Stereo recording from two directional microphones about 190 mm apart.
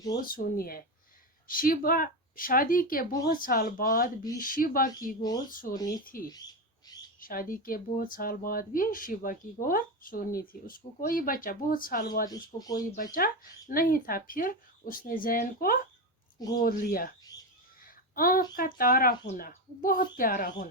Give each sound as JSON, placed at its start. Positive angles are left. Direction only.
{"t": 0.1, "sound": "speech", "side_deg": 50}
{"t": 5.7, "sound": "speech", "side_deg": 20}
{"t": 7.2, "sound": "speech", "side_deg": 50}
{"t": 12.5, "sound": "speech", "side_deg": 20}
{"t": 13.1, "sound": "speech", "side_deg": 50}
{"t": 17.8, "sound": "a sound", "side_deg": 50}
{"t": 18.5, "sound": "speech", "side_deg": 50}